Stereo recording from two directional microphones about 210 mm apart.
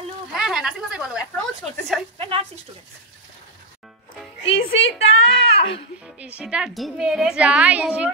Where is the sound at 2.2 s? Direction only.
25° right (ahead or behind).